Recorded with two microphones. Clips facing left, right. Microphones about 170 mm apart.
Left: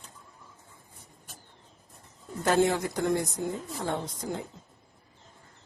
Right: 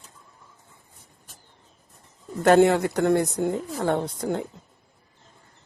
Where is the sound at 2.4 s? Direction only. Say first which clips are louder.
Right 8 dB; 65° right (ahead or behind).